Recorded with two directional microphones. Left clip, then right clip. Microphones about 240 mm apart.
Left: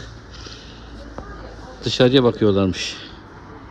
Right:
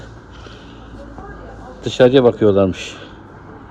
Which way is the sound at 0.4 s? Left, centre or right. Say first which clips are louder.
Even; centre.